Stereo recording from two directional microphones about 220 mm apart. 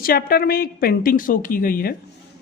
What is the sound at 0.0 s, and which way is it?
A woman's voice, 40° left (ahead or behind).